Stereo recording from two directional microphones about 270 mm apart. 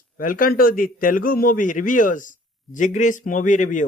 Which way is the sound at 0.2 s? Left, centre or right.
Left.